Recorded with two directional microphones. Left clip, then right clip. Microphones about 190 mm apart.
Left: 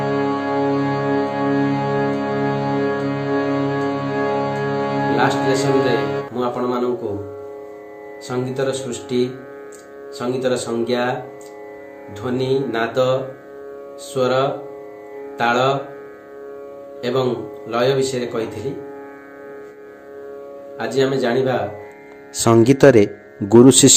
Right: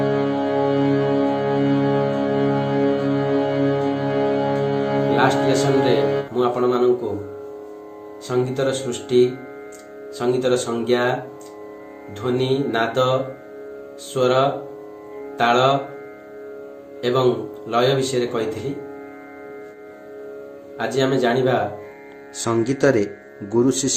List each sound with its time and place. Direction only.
0.3 s music: 30° left (ahead or behind)
5.5 s speech: centre (ahead or behind)
5.9 s music: 30° left (ahead or behind)
6.3 s speech: centre (ahead or behind)
8.3 s speech: centre (ahead or behind)
12.2 s speech: 5° right (ahead or behind)
17.0 s speech: 5° right (ahead or behind)
20.7 s speech: centre (ahead or behind)
22.4 s speech: 35° left (ahead or behind)